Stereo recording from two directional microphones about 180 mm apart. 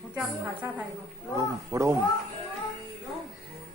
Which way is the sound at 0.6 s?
15° right (ahead or behind).